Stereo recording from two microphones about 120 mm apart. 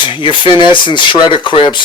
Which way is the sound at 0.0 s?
45° left (ahead or behind).